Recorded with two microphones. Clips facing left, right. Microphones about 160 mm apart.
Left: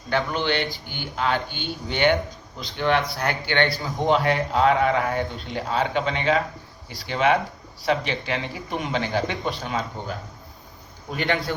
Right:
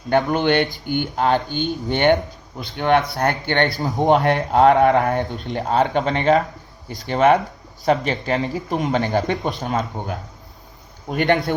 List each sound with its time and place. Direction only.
0.1 s speech: 45° right (ahead or behind)